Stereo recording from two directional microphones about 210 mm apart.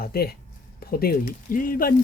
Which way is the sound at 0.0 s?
45° left (ahead or behind).